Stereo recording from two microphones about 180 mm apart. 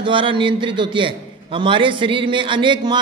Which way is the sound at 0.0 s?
30° right (ahead or behind).